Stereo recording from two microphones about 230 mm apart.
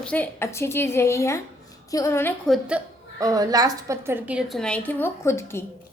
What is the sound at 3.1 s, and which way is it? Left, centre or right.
A woman's voice, centre.